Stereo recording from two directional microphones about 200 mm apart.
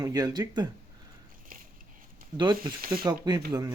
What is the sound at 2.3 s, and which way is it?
Speech, 20° right (ahead or behind).